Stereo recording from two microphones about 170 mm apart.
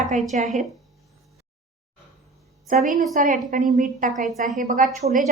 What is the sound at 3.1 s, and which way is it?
Speech, 50° right (ahead or behind).